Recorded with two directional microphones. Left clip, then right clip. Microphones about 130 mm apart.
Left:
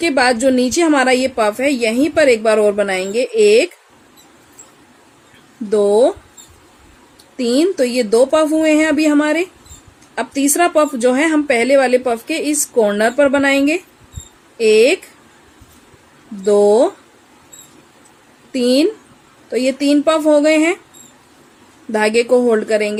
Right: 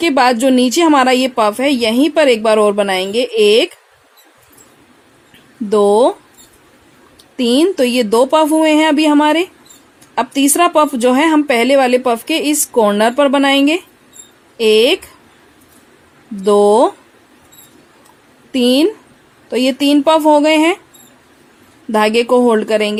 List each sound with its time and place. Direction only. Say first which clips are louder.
0.0 s speech: right 2 dB; 65° right (ahead or behind)
5.6 s speech: right 2 dB; 50° right (ahead or behind)
7.3 s speech: right 2 dB; 65° right (ahead or behind)
16.4 s speech: right 2 dB; 55° right (ahead or behind)
18.5 s a woman's voice: right 2 dB; 60° right (ahead or behind)
21.9 s speech: right 2 dB; 65° right (ahead or behind)